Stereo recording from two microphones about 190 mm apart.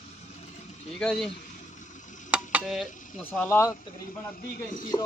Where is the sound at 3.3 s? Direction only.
10° left (ahead or behind).